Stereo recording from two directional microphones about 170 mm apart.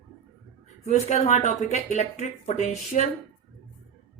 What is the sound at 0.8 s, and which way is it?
Speech, 40° left (ahead or behind).